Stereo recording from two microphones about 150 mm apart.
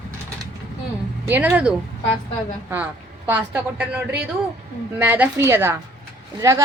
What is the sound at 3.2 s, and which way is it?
A woman's voice, 10° right (ahead or behind).